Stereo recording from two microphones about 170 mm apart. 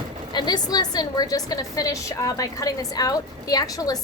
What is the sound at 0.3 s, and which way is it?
Speech, 25° left (ahead or behind).